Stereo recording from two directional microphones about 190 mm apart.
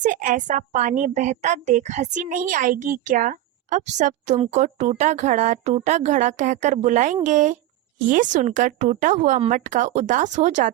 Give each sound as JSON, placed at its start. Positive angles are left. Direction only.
{"t": 0.0, "sound": "a woman's voice", "side_deg": -45}